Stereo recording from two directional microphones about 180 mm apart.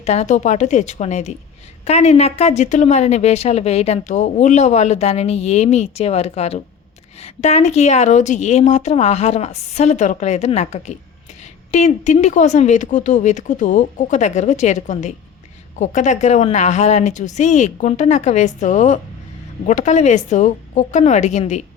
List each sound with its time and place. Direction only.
0.0 s speech: 40° left (ahead or behind)